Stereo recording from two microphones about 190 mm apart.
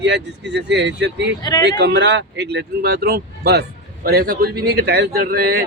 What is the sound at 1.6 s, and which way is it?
Speech, 65° right (ahead or behind).